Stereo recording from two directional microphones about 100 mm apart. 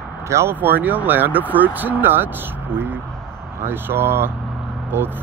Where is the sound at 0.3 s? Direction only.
25° right (ahead or behind).